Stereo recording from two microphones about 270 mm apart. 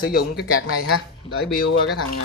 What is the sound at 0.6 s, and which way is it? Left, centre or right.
Speech, left.